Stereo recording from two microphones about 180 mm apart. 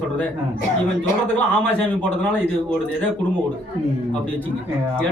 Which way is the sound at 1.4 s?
10° left (ahead or behind).